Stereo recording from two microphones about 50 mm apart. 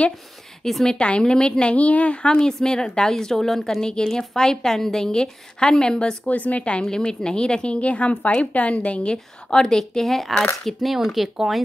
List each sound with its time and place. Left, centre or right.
0.8 s a woman's voice: left
2.2 s a woman's voice: centre
6.2 s a woman's voice: left; by 11.6 s centre